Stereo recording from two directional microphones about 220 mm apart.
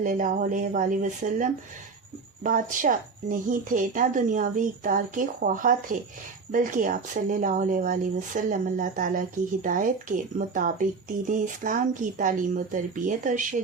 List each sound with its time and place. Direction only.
0.0 s speech: 35° right (ahead or behind)